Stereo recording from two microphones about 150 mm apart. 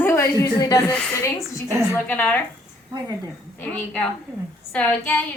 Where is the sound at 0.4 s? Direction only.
30° left (ahead or behind).